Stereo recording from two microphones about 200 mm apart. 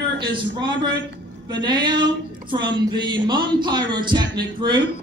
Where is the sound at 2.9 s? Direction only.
20° right (ahead or behind).